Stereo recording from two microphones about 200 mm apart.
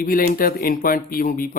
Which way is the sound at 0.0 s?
45° left (ahead or behind).